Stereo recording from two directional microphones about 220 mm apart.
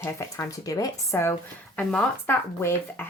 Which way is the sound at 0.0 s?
15° left (ahead or behind).